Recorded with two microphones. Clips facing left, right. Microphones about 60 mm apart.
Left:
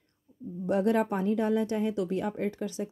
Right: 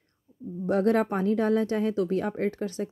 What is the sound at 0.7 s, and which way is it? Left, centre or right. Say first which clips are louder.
Speech: right 2 dB; right.